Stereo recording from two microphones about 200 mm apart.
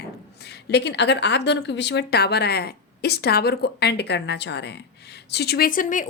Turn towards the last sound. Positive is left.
turn(degrees=40)  # may be behind; listen again after turning